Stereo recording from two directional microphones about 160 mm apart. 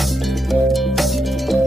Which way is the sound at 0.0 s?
Centre (ahead or behind).